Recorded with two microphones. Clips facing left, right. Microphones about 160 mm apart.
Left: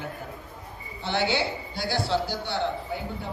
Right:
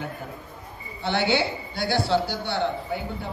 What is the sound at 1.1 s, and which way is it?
A man's voice, 65° right (ahead or behind).